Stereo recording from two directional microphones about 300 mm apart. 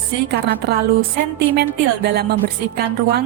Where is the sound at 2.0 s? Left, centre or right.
Right.